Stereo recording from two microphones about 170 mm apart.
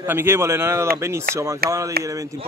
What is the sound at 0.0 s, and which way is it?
A man's voice, 15° right (ahead or behind).